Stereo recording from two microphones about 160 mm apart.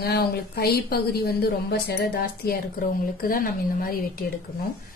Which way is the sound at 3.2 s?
60° left (ahead or behind).